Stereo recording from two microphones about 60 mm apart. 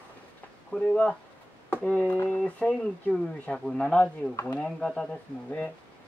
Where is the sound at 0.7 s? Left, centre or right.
Left.